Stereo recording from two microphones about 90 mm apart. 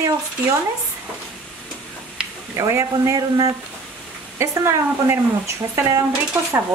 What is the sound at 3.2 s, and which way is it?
Speech, 45° right (ahead or behind).